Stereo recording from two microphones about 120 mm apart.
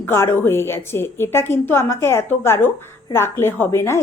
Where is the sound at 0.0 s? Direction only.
20° left (ahead or behind).